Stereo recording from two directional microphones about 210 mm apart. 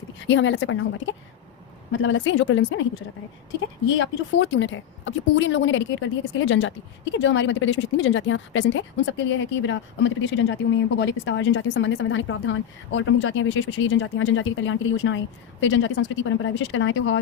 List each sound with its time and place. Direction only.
0.3 s speech: 65° left (ahead or behind)
1.9 s speech: 65° left (ahead or behind)
3.9 s speech: 65° left (ahead or behind)